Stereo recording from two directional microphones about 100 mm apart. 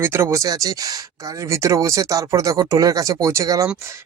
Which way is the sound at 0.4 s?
40° right (ahead or behind).